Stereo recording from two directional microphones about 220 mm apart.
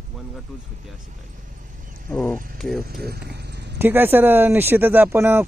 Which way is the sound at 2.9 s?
45° right (ahead or behind).